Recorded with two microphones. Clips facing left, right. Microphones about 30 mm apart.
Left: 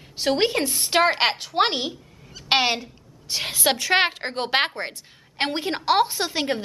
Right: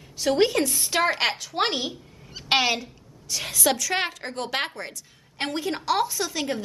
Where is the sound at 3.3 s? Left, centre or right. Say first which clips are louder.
Left 2 dB; left.